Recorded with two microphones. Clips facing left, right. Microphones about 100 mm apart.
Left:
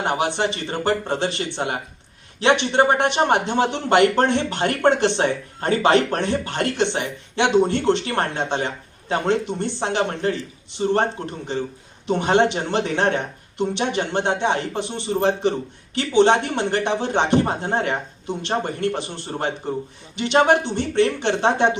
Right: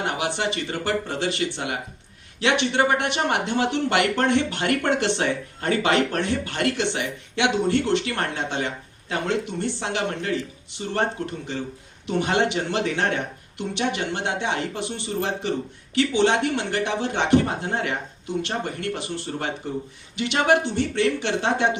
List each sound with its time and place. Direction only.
0.0 s speech: 30° left (ahead or behind)